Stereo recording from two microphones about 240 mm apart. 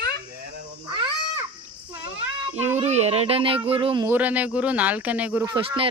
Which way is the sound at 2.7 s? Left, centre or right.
Right.